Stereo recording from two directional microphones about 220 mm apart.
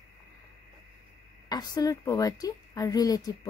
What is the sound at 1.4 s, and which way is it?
A woman's voice, 15° left (ahead or behind).